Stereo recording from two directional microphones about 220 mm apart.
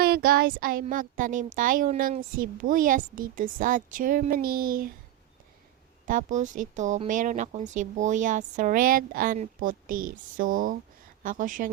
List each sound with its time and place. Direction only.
0.0 s speech: 45° right (ahead or behind)
6.1 s speech: 35° right (ahead or behind)